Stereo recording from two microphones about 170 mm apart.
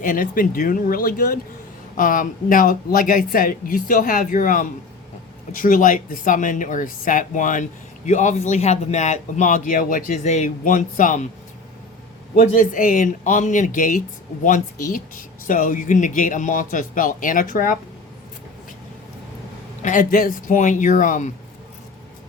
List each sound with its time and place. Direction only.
0.0 s speech: 50° left (ahead or behind)
12.4 s speech: 50° left (ahead or behind)
19.8 s speech: 50° left (ahead or behind)